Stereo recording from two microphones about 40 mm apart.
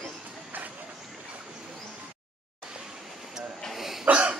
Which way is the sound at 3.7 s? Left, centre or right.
Centre.